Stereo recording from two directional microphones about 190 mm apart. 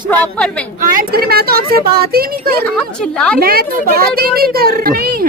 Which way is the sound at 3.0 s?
5° left (ahead or behind).